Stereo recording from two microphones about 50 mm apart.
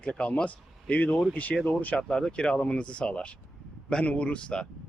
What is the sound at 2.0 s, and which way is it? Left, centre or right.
A man's voice, centre.